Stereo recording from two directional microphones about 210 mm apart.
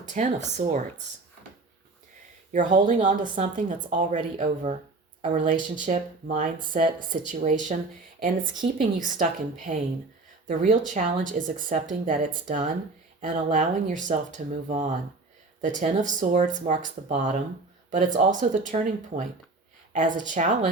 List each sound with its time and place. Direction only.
0.0 s a woman's voice: 35° right (ahead or behind)
2.5 s a woman's voice: 35° right (ahead or behind)